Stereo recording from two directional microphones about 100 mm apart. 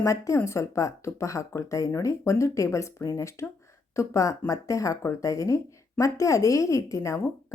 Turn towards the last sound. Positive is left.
turn(degrees=30)  # may be behind; listen again after turning